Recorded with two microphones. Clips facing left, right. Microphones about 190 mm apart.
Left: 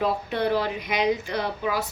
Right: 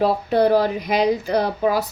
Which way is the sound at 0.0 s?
35° right (ahead or behind).